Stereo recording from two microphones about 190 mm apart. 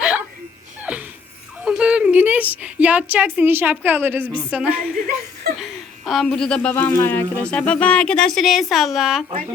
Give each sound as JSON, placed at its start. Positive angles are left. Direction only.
{"t": 0.0, "sound": "a sound", "side_deg": -5}
{"t": 1.6, "sound": "speech", "side_deg": -5}
{"t": 5.0, "sound": "speech", "side_deg": -50}
{"t": 6.1, "sound": "speech", "side_deg": 0}